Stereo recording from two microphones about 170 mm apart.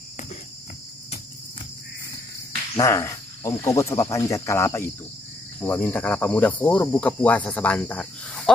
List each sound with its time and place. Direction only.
2.7 s cricket: 20° left (ahead or behind)